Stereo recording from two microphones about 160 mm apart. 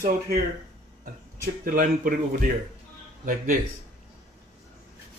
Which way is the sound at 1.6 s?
60° right (ahead or behind).